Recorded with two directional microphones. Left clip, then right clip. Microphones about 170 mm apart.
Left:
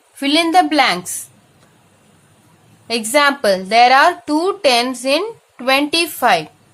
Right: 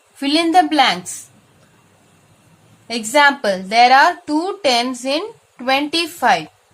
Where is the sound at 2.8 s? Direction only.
25° left (ahead or behind).